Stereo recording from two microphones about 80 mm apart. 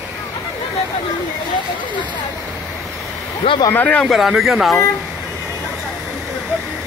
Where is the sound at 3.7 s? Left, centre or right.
Centre.